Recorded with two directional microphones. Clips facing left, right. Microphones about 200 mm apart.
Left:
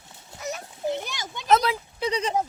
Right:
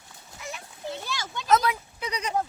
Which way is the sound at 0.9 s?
20° left (ahead or behind).